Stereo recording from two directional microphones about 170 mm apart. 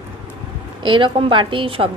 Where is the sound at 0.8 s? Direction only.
30° right (ahead or behind).